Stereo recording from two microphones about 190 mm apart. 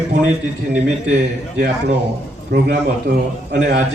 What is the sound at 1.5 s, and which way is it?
A man's voice, 60° right (ahead or behind).